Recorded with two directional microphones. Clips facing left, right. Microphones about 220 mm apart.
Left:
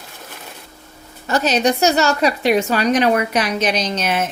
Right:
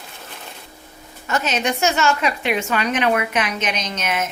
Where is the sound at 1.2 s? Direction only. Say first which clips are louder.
Left 5 dB; 35° left (ahead or behind).